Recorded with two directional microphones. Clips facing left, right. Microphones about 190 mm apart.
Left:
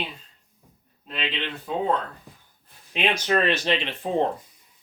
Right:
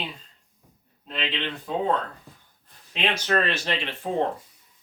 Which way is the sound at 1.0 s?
5° left (ahead or behind).